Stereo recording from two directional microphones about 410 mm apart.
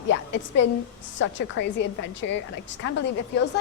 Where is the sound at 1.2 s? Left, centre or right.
Left.